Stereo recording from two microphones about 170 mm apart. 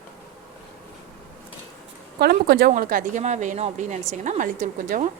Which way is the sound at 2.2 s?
70° right (ahead or behind).